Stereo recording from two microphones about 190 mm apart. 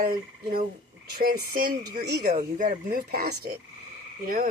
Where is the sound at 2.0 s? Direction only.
60° right (ahead or behind).